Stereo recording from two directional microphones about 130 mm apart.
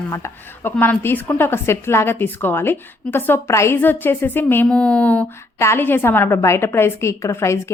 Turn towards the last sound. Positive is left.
turn(degrees=20)  # may be behind; listen again after turning